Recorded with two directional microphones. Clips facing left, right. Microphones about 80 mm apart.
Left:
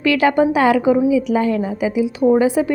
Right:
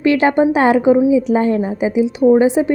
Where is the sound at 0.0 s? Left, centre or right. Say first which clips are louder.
Right 2 dB; right.